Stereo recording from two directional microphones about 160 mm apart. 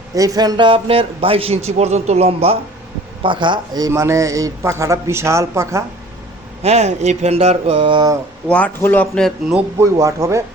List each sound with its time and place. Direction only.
0.1 s speech: 20° right (ahead or behind); by 2.6 s 40° right (ahead or behind)
3.2 s a man's voice: 30° right (ahead or behind)
6.6 s speech: 40° right (ahead or behind)
8.4 s a man's voice: 10° left (ahead or behind)
9.6 s speech: 15° right (ahead or behind)